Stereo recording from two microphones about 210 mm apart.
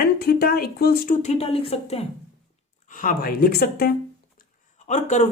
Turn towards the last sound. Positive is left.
turn(degrees=35)  # may be behind; listen again after turning